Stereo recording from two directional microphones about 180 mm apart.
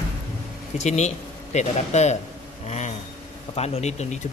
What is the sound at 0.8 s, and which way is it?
Speech, 40° left (ahead or behind).